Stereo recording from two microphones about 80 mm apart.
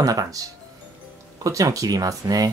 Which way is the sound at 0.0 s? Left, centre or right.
Right.